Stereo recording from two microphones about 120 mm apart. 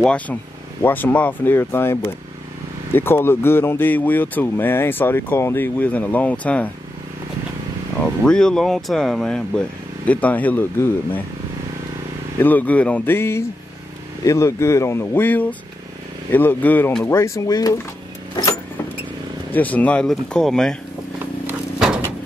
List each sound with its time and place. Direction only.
0.0 s speech: 10° left (ahead or behind)
8.0 s speech: 5° left (ahead or behind)
12.4 s speech: 15° left (ahead or behind); by 17.7 s 30° left (ahead or behind)
18.3 s vehicle: 30° left (ahead or behind)
19.5 s speech: 15° left (ahead or behind)
21.5 s a sound: 5° right (ahead or behind)